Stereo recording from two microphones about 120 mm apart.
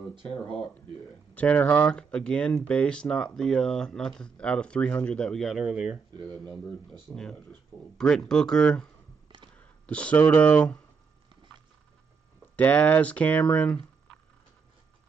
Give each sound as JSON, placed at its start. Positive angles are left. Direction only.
{"t": 0.1, "sound": "speech", "side_deg": -45}
{"t": 1.3, "sound": "speech", "side_deg": 10}
{"t": 8.0, "sound": "speech", "side_deg": 5}
{"t": 12.5, "sound": "speech", "side_deg": 15}